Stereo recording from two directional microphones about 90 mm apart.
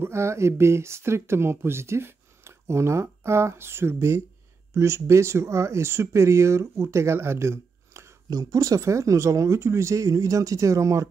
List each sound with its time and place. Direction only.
0.0 s speech: 30° right (ahead or behind)
8.3 s speech: 40° right (ahead or behind)